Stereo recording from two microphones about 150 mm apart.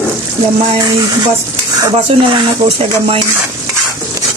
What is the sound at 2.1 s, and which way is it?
Speech, 40° right (ahead or behind).